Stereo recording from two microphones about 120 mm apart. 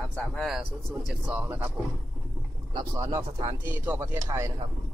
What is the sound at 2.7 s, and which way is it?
Speech, 30° right (ahead or behind).